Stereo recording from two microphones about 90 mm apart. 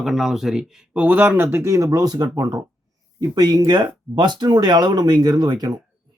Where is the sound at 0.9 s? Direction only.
15° right (ahead or behind).